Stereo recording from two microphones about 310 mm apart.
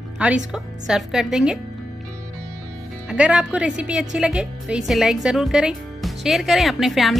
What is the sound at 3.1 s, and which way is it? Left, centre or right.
A woman's voice, centre.